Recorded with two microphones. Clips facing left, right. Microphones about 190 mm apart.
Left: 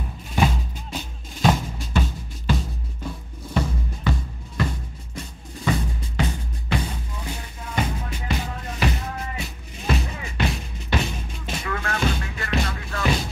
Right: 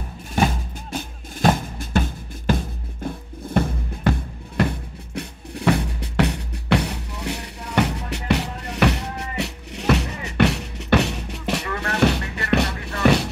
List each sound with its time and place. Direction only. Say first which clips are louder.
0.4 s drum: right 1 dB; 50° right (ahead or behind); by 11.6 s 70° right (ahead or behind)
11.8 s music: right 7 dB; 70° right (ahead or behind)